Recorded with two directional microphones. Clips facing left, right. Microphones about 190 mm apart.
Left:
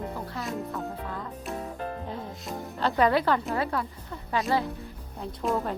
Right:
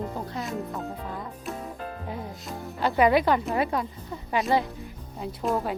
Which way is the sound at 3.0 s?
15° right (ahead or behind).